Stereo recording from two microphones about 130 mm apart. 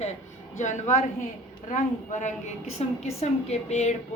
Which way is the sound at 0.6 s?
70° left (ahead or behind).